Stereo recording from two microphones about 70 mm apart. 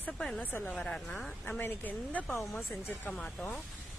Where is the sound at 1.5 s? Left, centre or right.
Left.